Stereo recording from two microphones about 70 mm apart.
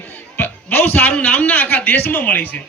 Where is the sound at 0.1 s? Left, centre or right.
Left.